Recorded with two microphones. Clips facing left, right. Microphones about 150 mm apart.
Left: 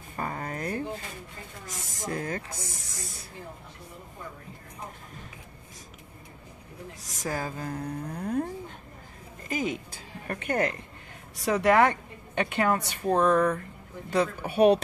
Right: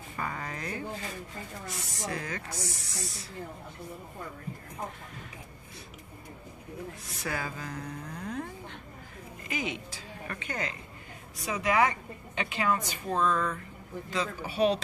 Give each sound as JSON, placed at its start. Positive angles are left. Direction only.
{"t": 0.1, "sound": "a sound", "side_deg": 35}
{"t": 1.7, "sound": "speech", "side_deg": 45}
{"t": 7.1, "sound": "a woman's voice", "side_deg": 40}